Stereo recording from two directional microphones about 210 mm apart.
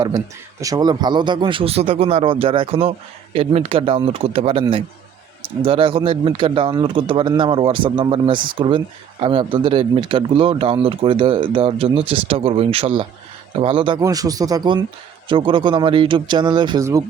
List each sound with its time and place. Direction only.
0.6 s speech: 20° right (ahead or behind)
5.6 s speech: 25° right (ahead or behind)